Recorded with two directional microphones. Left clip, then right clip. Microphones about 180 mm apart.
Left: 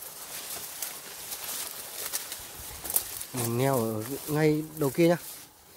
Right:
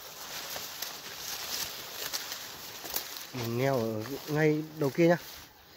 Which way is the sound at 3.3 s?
25° left (ahead or behind).